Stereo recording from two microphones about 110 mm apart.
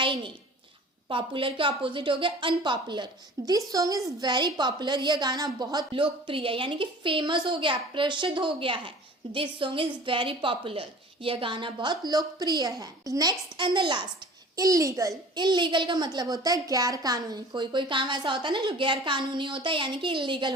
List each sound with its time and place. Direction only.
0.0 s a woman's voice: 50° right (ahead or behind)
14.5 s a child's voice: 30° right (ahead or behind)
15.4 s a woman's voice: 45° right (ahead or behind)